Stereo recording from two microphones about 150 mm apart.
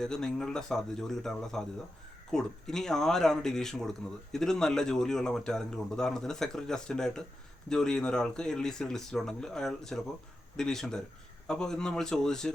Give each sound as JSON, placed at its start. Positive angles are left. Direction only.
{"t": 0.0, "sound": "speech", "side_deg": 5}